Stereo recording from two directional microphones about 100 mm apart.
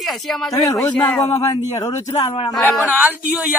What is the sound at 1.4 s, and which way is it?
Speech, 35° left (ahead or behind).